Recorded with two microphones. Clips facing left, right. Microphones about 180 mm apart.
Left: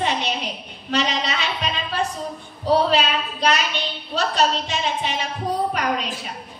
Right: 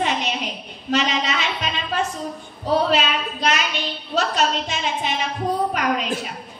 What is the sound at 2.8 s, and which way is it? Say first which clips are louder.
Speech: even; 35° left (ahead or behind).